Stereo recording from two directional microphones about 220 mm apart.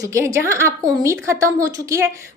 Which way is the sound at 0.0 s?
15° right (ahead or behind).